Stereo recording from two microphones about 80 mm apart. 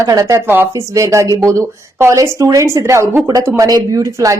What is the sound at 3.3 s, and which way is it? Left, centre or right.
Speech, right.